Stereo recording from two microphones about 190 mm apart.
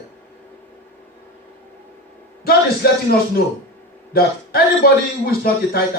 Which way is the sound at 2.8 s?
55° left (ahead or behind).